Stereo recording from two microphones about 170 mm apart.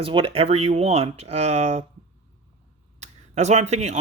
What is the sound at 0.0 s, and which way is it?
Speech, 30° right (ahead or behind).